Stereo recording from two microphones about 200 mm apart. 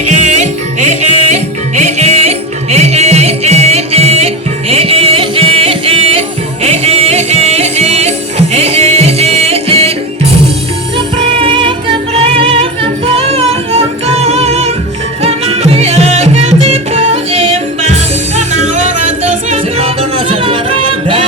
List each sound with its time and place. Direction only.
0.0 s music: 35° right (ahead or behind)
10.9 s music: 25° right (ahead or behind)